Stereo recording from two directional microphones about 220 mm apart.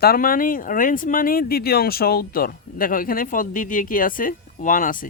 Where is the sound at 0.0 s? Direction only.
40° left (ahead or behind).